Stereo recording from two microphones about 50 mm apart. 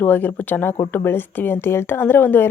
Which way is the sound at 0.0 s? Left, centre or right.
Left.